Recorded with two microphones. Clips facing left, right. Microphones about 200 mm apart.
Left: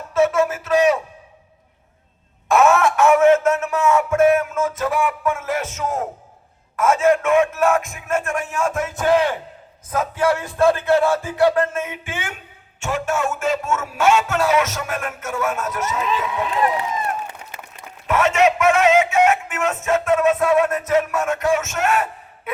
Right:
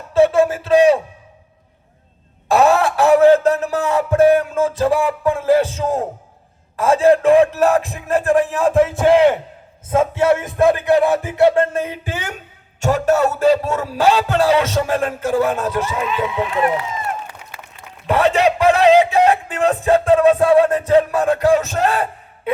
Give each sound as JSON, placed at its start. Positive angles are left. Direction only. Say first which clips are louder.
{"t": 0.1, "sound": "music", "louder": "right 4 dB", "side_deg": -30}
{"t": 2.5, "sound": "music", "louder": "right 1 dB", "side_deg": -35}
{"t": 17.5, "sound": "a sound", "louder": "left 1 dB", "side_deg": 20}
{"t": 18.1, "sound": "music", "louder": "right 2 dB", "side_deg": -35}